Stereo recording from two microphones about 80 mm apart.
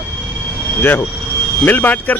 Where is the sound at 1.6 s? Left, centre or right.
Left.